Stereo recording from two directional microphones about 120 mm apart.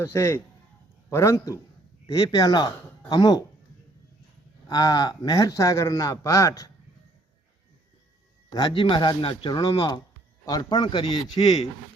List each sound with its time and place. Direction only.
0.0 s a man's voice: 25° left (ahead or behind)
4.7 s a man's voice: 30° left (ahead or behind)
8.5 s a man's voice: 40° left (ahead or behind)